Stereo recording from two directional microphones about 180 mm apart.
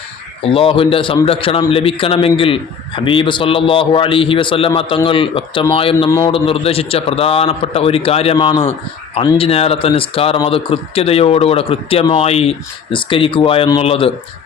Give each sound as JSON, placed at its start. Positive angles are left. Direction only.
{"t": 0.5, "sound": "a man's voice", "side_deg": 30}
{"t": 6.1, "sound": "a man's voice", "side_deg": 15}
{"t": 6.3, "sound": "speech", "side_deg": 30}